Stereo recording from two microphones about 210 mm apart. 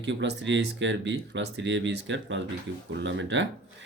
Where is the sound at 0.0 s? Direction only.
60° right (ahead or behind).